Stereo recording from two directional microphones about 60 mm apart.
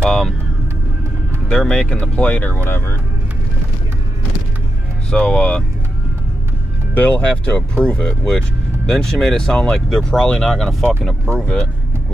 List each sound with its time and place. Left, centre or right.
0.0 s vehicle: centre
1.5 s speech: centre
2.0 s speech: left
5.1 s speech: centre
6.9 s speech: left; by 11.0 s centre
11.3 s speech: centre